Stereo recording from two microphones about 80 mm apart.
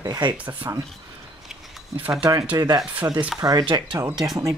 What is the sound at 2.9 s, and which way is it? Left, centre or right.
Speech, centre.